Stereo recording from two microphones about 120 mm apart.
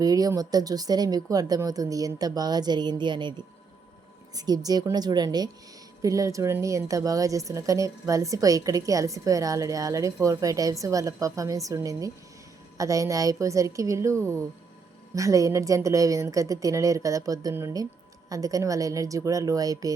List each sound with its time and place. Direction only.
0.0 s a woman's voice: 30° right (ahead or behind)